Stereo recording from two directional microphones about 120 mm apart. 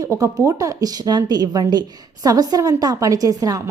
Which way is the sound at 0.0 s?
25° right (ahead or behind).